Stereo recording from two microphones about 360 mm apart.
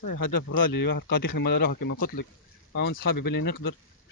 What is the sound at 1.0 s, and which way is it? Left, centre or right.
Speech, left.